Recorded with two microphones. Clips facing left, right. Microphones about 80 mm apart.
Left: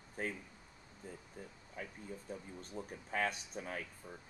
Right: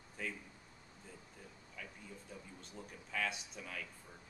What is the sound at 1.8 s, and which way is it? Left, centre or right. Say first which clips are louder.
Speech: left 5 dB; left.